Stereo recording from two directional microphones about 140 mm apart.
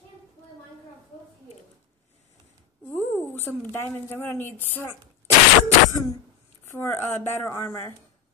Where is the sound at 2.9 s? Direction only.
10° left (ahead or behind).